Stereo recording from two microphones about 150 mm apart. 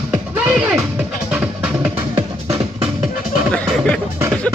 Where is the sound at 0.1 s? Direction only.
10° right (ahead or behind).